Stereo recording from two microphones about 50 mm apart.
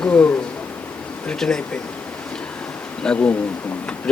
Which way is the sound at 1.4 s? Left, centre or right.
Centre.